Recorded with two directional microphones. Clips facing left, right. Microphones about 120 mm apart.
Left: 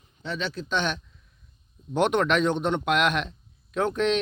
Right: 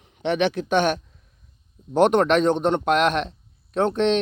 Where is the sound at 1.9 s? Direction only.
40° right (ahead or behind).